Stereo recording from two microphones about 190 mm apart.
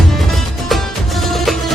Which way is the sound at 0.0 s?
Centre (ahead or behind).